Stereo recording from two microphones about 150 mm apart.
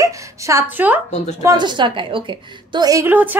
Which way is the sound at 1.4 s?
30° right (ahead or behind).